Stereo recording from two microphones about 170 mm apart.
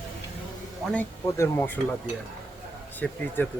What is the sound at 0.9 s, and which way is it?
Speech, 15° left (ahead or behind).